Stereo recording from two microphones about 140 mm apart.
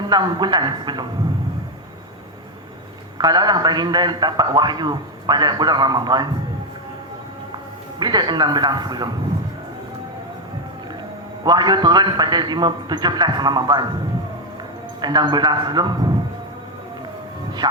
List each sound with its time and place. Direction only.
0.1 s a man's voice: 30° right (ahead or behind)
3.2 s a man's voice: 30° right (ahead or behind)
7.9 s a man's voice: 30° right (ahead or behind)
11.4 s a man's voice: 30° right (ahead or behind)
15.0 s a man's voice: 30° right (ahead or behind)
17.6 s a sound: 30° right (ahead or behind)